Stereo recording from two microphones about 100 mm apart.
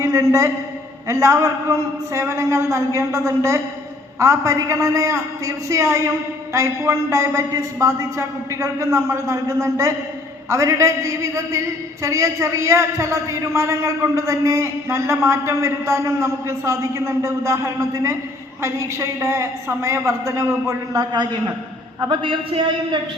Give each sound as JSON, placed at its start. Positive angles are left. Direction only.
{"t": 0.0, "sound": "a man's voice", "side_deg": -30}